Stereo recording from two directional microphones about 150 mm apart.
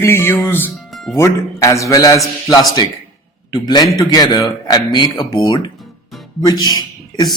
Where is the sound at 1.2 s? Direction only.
20° left (ahead or behind).